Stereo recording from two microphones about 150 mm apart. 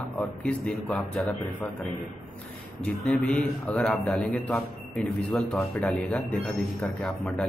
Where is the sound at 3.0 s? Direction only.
5° left (ahead or behind).